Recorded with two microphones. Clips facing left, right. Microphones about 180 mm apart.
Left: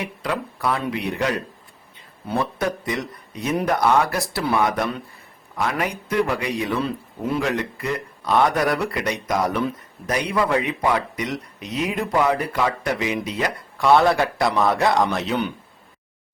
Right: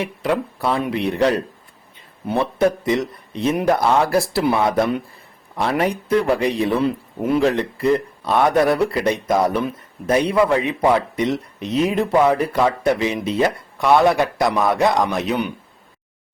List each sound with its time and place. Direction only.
0.0 s speech: 25° right (ahead or behind)